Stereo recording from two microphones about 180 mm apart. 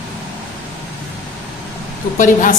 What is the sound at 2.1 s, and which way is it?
Speech, 45° left (ahead or behind).